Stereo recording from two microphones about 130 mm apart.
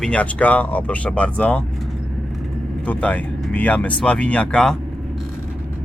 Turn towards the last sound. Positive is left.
turn(degrees=5)  # may be behind; listen again after turning